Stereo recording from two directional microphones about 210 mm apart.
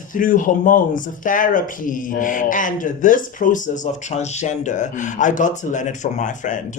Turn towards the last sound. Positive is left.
turn(degrees=35)  # may be behind; listen again after turning